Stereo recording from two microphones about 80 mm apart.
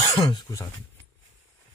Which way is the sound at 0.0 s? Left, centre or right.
Left.